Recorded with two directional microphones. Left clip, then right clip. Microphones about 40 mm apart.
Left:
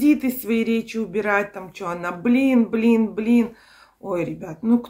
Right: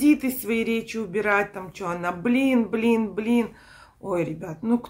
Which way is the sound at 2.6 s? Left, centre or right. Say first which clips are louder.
Left 3 dB; right.